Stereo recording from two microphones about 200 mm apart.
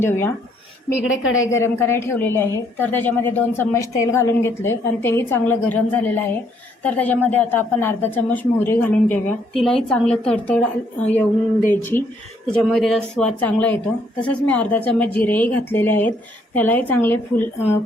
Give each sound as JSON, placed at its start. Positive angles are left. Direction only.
{"t": 0.0, "sound": "a woman's voice", "side_deg": 10}
{"t": 1.0, "sound": "a woman's voice", "side_deg": 80}
{"t": 1.6, "sound": "a woman's voice", "side_deg": 10}